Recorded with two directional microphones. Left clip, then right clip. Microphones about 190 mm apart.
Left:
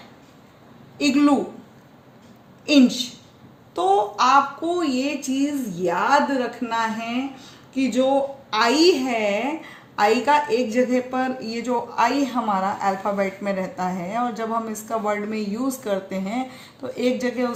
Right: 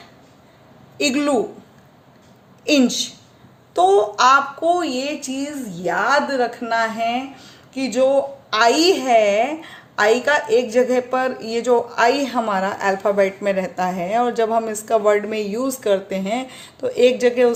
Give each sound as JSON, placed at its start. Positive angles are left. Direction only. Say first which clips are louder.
{"t": 0.9, "sound": "speech", "louder": "even", "side_deg": -35}
{"t": 2.6, "sound": "speech", "louder": "right 1 dB", "side_deg": -35}